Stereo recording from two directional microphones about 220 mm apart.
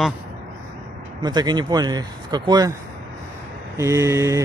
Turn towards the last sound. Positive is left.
turn(degrees=-15)  # may be behind; listen again after turning